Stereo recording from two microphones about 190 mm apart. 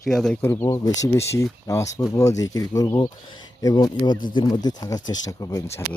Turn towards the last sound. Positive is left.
turn(degrees=15)  # may be behind; listen again after turning